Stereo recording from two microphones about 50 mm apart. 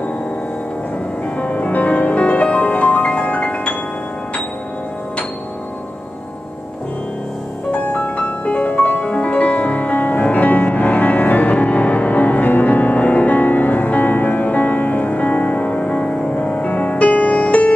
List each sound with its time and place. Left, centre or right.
1.4 s music: left
7.7 s music: left